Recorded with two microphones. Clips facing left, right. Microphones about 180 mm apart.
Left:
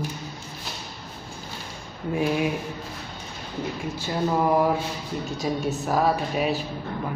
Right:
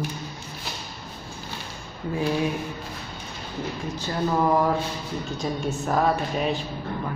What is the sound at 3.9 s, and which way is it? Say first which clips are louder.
Speech: even; 10° left (ahead or behind).